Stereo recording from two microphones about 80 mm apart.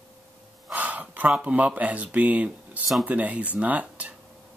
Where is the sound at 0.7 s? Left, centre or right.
Centre.